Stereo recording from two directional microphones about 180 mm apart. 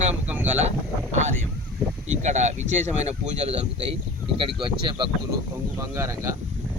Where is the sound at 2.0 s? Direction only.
40° right (ahead or behind).